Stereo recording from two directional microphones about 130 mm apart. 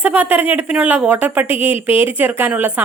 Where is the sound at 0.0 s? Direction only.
10° right (ahead or behind).